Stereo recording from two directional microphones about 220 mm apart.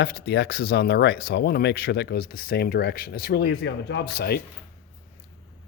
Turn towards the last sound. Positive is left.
turn(degrees=45)  # may be behind; listen again after turning